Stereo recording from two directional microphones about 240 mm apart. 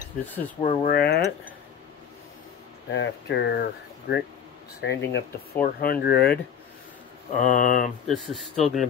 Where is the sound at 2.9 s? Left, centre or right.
Left.